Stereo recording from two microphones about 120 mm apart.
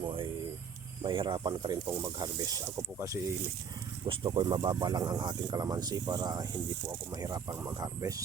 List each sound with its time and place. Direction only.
0.0 s a sound: 45° right (ahead or behind)
1.0 s speech: 40° right (ahead or behind)
1.9 s speech: 20° right (ahead or behind)
2.1 s speech: 35° right (ahead or behind)
4.0 s speech: 40° right (ahead or behind)